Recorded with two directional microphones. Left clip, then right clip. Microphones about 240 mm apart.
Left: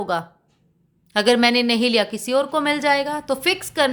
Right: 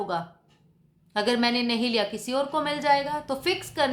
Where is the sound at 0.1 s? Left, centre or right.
Left.